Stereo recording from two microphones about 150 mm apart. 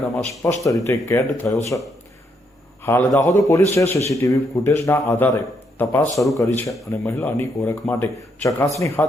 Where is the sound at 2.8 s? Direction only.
15° left (ahead or behind).